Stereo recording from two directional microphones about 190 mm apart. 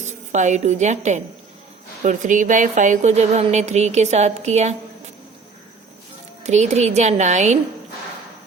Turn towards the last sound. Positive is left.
turn(degrees=-40)  # may be behind; listen again after turning